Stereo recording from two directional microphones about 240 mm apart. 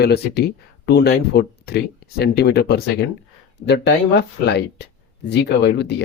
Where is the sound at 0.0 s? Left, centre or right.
Left.